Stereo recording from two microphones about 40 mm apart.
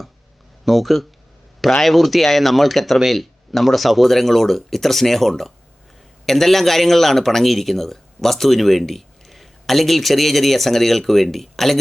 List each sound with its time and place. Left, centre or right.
0.6 s a man's voice: centre